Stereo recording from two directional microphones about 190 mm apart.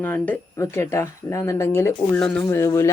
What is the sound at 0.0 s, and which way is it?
Speech, 10° left (ahead or behind).